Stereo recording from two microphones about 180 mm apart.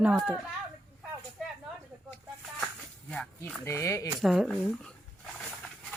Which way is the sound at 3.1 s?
5° left (ahead or behind).